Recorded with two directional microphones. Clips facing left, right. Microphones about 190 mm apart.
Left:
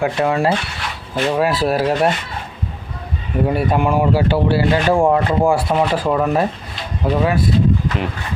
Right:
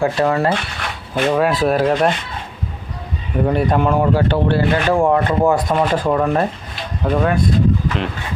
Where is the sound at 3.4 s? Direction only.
5° left (ahead or behind).